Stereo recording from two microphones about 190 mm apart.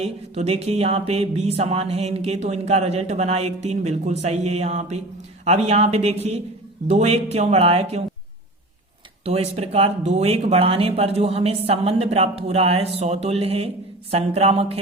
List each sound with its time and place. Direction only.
0.0 s speech: 35° right (ahead or behind)
9.2 s speech: 35° right (ahead or behind)